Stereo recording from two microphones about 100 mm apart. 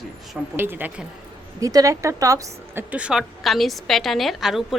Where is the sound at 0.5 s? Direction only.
20° right (ahead or behind).